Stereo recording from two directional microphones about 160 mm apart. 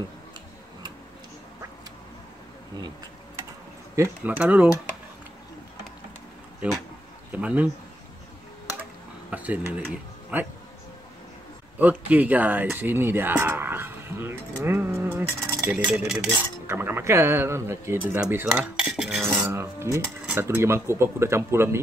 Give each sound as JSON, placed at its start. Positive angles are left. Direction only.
{"t": 3.9, "sound": "speech", "side_deg": -15}
{"t": 6.6, "sound": "speech", "side_deg": -10}
{"t": 9.3, "sound": "speech", "side_deg": -10}
{"t": 11.8, "sound": "speech", "side_deg": -10}
{"t": 19.4, "sound": "speech", "side_deg": -15}